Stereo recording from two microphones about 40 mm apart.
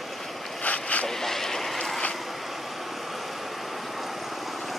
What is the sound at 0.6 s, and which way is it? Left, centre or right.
Vehicle, left.